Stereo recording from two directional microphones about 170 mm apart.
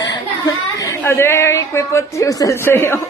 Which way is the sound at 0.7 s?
15° left (ahead or behind).